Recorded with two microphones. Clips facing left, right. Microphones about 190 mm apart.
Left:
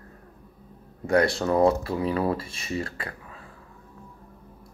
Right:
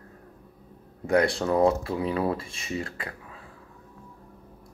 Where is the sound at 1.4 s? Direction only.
10° right (ahead or behind).